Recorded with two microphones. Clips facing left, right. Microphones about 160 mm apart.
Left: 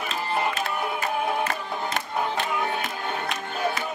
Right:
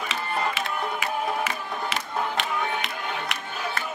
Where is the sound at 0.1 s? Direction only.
90° right.